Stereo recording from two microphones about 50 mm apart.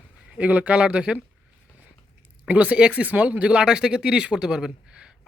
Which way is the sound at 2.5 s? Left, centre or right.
Right.